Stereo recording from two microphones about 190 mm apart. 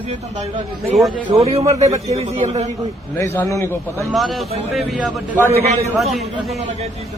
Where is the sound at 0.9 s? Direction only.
Centre (ahead or behind).